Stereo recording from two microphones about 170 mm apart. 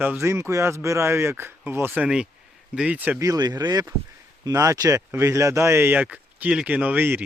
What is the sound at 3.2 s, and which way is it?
A man's voice, 20° right (ahead or behind).